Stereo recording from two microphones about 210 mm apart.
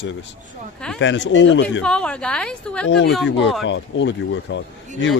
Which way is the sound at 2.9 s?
55° left (ahead or behind).